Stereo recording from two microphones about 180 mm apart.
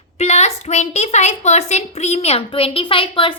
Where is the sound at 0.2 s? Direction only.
40° left (ahead or behind).